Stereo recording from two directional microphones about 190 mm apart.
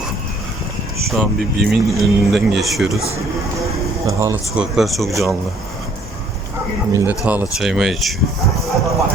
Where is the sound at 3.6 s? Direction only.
15° right (ahead or behind).